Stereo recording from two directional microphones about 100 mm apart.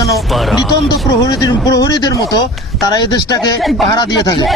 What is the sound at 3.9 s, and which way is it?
Speech, 45° left (ahead or behind).